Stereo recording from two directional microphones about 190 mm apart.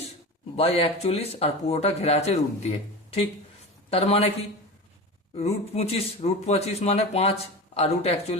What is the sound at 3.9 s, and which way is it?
Speech, 30° left (ahead or behind).